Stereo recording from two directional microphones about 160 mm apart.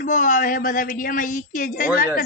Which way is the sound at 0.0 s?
60° left (ahead or behind).